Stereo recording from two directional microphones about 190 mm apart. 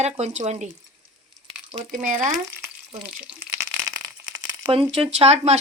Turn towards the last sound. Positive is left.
turn(degrees=-35)  # may be behind; listen again after turning